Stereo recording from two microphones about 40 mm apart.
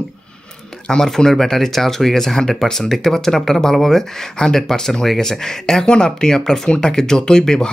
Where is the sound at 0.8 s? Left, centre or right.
Centre.